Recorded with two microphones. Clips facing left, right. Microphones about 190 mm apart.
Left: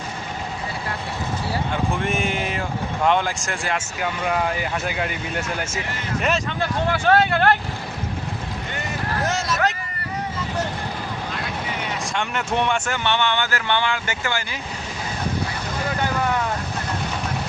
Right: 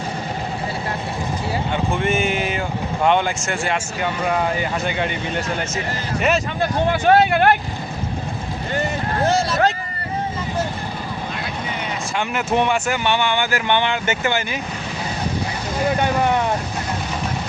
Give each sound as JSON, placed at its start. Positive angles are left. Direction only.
{"t": 1.7, "sound": "speech", "side_deg": 0}
{"t": 6.9, "sound": "speech", "side_deg": -15}
{"t": 8.7, "sound": "a sound", "side_deg": -30}
{"t": 12.1, "sound": "speech", "side_deg": -5}
{"t": 15.9, "sound": "speech", "side_deg": -20}